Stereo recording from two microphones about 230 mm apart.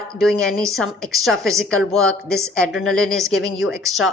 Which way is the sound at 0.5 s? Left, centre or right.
Centre.